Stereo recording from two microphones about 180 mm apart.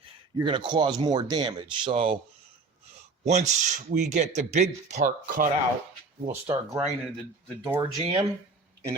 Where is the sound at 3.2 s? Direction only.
40° right (ahead or behind).